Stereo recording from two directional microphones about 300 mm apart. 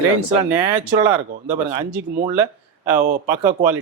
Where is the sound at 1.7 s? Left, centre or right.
Centre.